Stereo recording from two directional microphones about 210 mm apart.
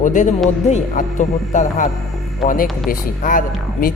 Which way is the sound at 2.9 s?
40° left (ahead or behind).